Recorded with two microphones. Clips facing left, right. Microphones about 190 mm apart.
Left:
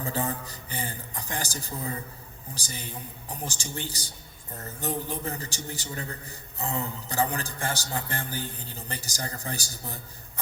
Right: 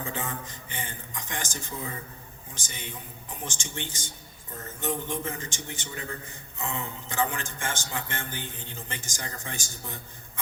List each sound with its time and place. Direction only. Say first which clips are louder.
0.0 s a man's voice: left 4 dB; 35° left (ahead or behind)